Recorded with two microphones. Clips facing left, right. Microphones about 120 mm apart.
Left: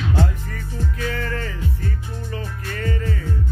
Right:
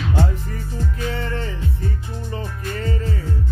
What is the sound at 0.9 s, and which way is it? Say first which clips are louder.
Music: even; 25° right (ahead or behind).